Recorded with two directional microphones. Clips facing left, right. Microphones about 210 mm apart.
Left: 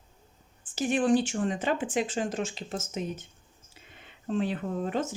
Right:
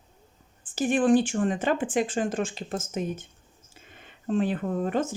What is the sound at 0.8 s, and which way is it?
Speech, 50° right (ahead or behind).